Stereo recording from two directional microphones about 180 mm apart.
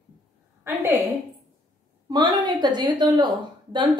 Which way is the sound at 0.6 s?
15° right (ahead or behind).